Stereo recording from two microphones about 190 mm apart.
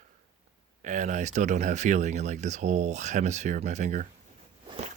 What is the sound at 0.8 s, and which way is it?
Speech, 40° right (ahead or behind).